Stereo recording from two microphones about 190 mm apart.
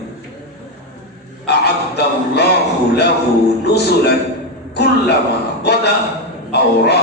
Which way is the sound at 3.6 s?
60° left (ahead or behind).